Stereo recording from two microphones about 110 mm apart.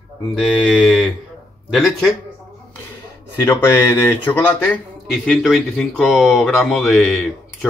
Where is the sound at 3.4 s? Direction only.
20° left (ahead or behind).